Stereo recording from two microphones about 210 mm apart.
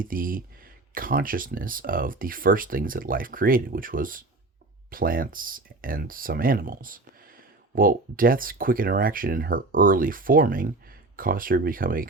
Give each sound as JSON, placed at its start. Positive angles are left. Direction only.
{"t": 0.0, "sound": "speech", "side_deg": -40}